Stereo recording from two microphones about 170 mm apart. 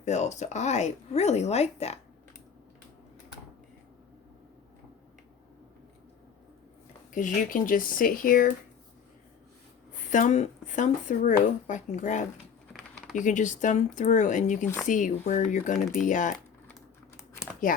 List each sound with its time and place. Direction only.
0.0 s speech: 40° left (ahead or behind)
7.1 s speech: 50° left (ahead or behind)
10.1 s speech: 45° left (ahead or behind)